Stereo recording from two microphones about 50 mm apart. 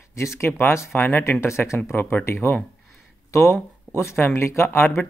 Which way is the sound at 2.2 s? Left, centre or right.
Left.